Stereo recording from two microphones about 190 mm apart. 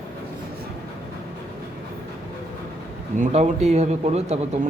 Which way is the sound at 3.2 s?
35° right (ahead or behind).